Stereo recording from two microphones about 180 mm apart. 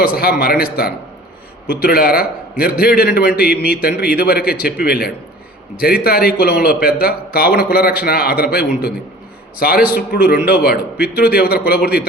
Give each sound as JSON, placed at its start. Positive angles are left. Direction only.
{"t": 0.0, "sound": "a man's voice", "side_deg": 55}